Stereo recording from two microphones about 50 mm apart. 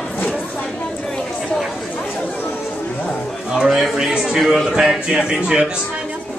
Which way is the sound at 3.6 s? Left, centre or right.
Centre.